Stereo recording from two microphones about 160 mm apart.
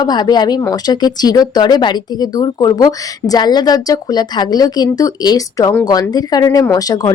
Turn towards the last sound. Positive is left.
turn(degrees=25)  # may be behind; listen again after turning